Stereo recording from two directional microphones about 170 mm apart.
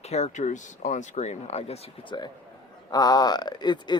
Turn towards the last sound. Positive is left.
turn(degrees=25)  # may be behind; listen again after turning